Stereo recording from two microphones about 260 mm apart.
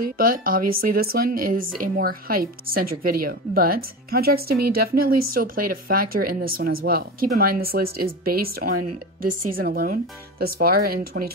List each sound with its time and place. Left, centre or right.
0.0 s speech: right